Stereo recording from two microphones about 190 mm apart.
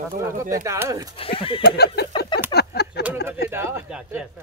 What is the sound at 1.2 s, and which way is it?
Speech, 30° left (ahead or behind).